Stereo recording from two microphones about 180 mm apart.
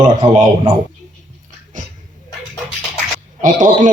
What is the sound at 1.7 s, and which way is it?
Speech, 45° right (ahead or behind).